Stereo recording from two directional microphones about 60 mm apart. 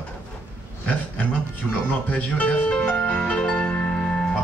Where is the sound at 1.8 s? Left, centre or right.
Left.